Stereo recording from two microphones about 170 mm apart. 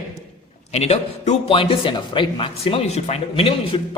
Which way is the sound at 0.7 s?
40° left (ahead or behind).